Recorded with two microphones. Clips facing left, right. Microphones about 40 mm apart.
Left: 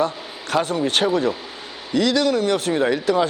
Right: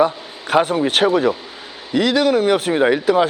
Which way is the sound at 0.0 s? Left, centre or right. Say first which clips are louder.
Right 5 dB; centre.